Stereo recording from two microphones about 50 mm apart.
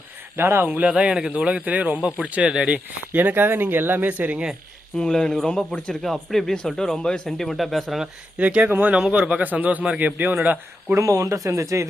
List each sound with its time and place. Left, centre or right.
0.3 s speech: right
0.9 s speech: centre
1.3 s speech: right
2.7 s speech: right
4.9 s speech: centre
8.4 s speech: right
10.9 s speech: right